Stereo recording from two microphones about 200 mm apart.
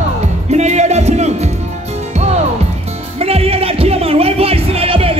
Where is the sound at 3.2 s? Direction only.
30° right (ahead or behind).